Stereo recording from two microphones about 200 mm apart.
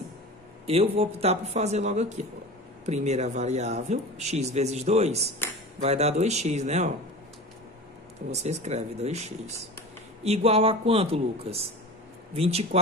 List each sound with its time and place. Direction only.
0.7 s speech: 30° right (ahead or behind)
8.3 s speech: 35° right (ahead or behind)